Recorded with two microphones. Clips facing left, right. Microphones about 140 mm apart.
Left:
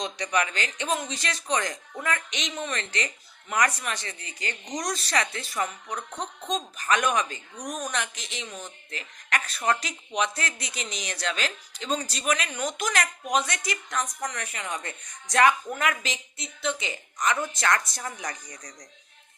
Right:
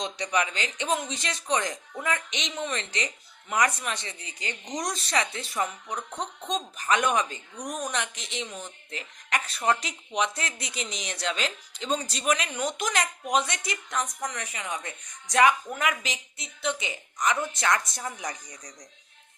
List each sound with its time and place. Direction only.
0.0 s speech: 20° right (ahead or behind)